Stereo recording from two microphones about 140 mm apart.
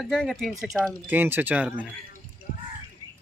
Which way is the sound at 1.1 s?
15° right (ahead or behind).